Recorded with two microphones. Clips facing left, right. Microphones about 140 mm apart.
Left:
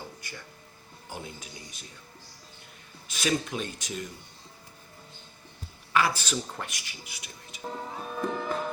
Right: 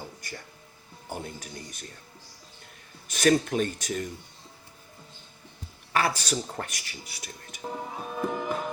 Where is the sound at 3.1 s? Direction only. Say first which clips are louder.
Right 6 dB; 50° right (ahead or behind).